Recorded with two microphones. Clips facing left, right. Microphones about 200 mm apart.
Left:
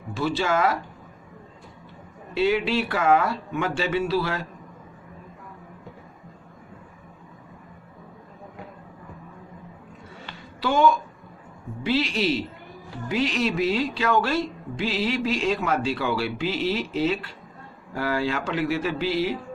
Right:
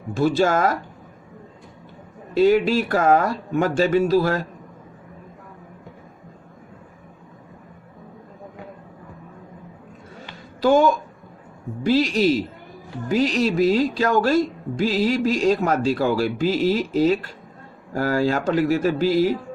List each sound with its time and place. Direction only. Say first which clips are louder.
0.1 s speech: right 6 dB; 45° right (ahead or behind)
2.3 s speech: right 6 dB; 45° right (ahead or behind)
10.6 s speech: right 4 dB; 45° right (ahead or behind)